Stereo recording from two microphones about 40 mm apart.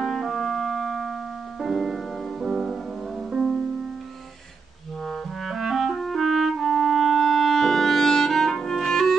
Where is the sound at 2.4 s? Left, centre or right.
Centre.